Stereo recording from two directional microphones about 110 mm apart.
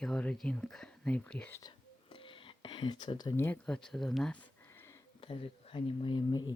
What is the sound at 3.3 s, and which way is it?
Speech, 20° left (ahead or behind).